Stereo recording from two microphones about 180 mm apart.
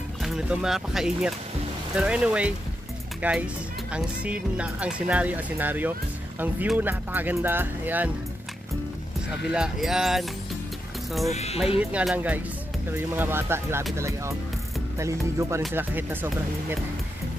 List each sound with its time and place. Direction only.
0.2 s speech: 5° right (ahead or behind)
9.5 s speech: 5° right (ahead or behind)
11.3 s speech: 35° left (ahead or behind)
11.8 s speech: 5° right (ahead or behind)